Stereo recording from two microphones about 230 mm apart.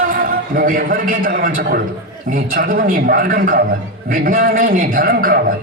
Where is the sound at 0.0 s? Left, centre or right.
Right.